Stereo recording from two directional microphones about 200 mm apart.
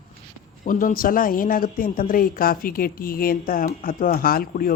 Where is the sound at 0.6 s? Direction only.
40° left (ahead or behind).